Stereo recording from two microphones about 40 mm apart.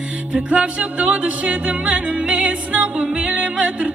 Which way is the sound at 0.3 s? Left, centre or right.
Right.